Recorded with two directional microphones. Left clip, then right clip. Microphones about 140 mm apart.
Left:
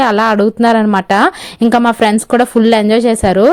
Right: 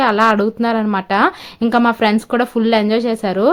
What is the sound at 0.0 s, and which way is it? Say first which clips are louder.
A woman's voice: left 3 dB; 60° left (ahead or behind).